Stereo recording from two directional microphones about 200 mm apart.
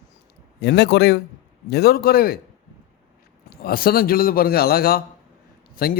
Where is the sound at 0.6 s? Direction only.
55° left (ahead or behind).